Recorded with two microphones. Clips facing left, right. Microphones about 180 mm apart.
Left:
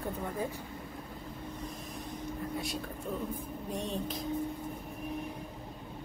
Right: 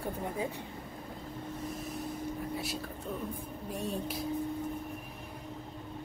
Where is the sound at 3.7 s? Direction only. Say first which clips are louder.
Right 1 dB; 10° right (ahead or behind).